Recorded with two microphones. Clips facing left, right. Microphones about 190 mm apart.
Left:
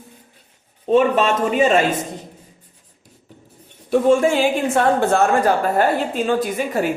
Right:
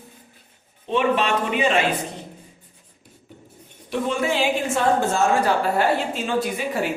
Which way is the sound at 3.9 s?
45° left (ahead or behind).